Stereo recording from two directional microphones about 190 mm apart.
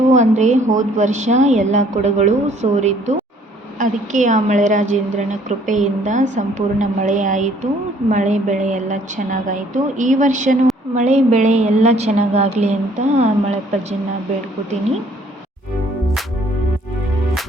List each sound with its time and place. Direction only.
0.1 s a woman's voice: 40° right (ahead or behind)